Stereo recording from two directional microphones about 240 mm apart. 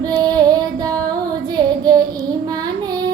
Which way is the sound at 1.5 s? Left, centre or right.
Centre.